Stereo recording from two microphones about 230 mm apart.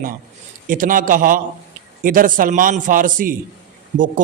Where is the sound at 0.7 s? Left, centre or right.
Right.